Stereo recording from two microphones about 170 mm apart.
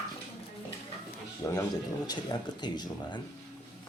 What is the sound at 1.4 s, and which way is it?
Speech, 20° left (ahead or behind).